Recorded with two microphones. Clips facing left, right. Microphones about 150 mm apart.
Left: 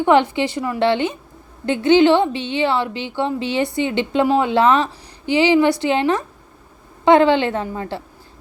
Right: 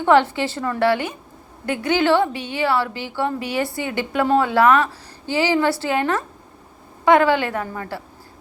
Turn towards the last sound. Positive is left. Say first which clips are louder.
# left 3 dB
turn(degrees=25)  # may be behind; listen again after turning